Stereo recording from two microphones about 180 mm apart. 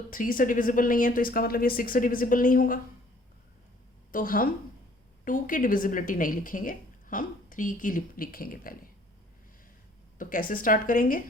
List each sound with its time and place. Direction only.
0.1 s a woman's voice: 50° left (ahead or behind)
4.1 s a woman's voice: 50° left (ahead or behind)
10.2 s a woman's voice: 50° left (ahead or behind)